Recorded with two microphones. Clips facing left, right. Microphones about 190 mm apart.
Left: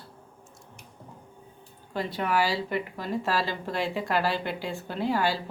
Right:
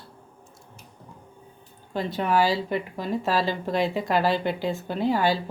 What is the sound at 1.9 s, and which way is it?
Speech, 25° right (ahead or behind).